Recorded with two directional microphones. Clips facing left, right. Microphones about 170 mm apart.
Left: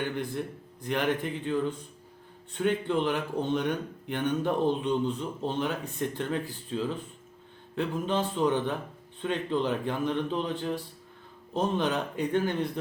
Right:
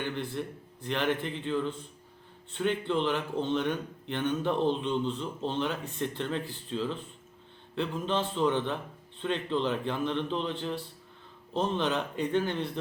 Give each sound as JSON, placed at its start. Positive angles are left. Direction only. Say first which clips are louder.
{"t": 0.0, "sound": "speech", "louder": "left 2 dB", "side_deg": 10}